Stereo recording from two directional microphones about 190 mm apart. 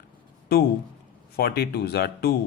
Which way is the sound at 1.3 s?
55° left (ahead or behind).